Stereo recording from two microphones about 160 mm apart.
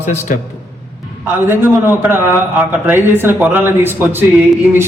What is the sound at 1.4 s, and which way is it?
A man's voice, 15° right (ahead or behind).